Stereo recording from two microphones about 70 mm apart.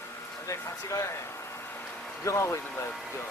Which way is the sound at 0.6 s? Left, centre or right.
Left.